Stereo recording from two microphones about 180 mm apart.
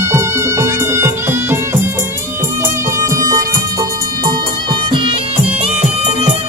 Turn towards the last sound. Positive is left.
turn(degrees=-30)  # may be behind; listen again after turning